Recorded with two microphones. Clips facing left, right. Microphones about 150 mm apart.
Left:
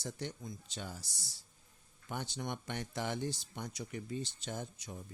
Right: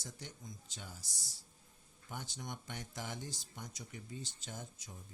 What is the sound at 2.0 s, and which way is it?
Speech, 70° left (ahead or behind).